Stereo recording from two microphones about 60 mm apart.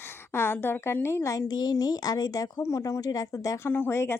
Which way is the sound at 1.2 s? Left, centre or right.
Left.